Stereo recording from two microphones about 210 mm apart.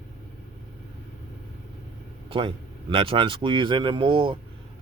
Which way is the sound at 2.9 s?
25° right (ahead or behind).